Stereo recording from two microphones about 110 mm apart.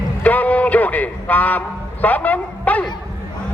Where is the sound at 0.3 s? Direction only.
15° left (ahead or behind).